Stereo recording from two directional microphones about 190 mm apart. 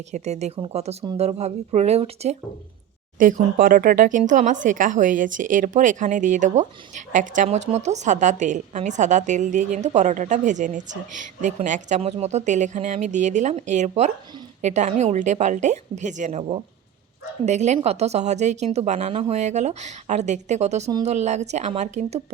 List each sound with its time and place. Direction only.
0.1 s speech: 35° right (ahead or behind)
3.2 s speech: 45° right (ahead or behind)
17.4 s speech: 35° right (ahead or behind)